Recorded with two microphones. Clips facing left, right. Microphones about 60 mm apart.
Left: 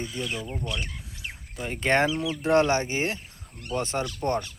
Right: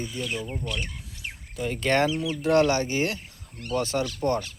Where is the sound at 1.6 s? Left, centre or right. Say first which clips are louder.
Even; left.